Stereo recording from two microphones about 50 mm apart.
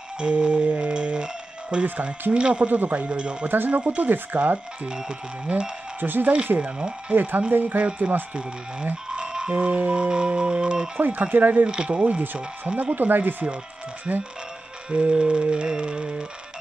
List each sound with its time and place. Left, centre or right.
0.2 s music: right
2.3 s speech: centre
2.7 s speech: right
3.4 s speech: right
4.8 s speech: centre
5.9 s speech: right
6.5 s speech: right
7.2 s speech: right
7.8 s speech: right
9.1 s a sound: centre
9.5 s speech: right
11.0 s speech: right
11.6 s speech: centre